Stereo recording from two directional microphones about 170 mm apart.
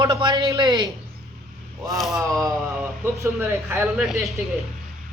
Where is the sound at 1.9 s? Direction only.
Centre (ahead or behind).